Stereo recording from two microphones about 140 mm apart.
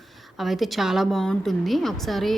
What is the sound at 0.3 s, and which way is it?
A woman's voice, centre (ahead or behind).